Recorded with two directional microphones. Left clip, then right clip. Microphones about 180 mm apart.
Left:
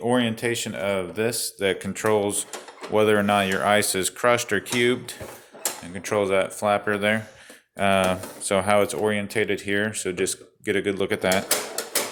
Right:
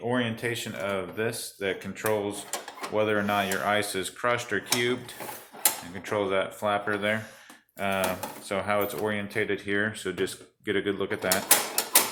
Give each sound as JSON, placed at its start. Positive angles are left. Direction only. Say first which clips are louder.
{"t": 0.0, "sound": "speech", "louder": "left 5 dB", "side_deg": 55}
{"t": 7.8, "sound": "speech", "louder": "left 7 dB", "side_deg": 60}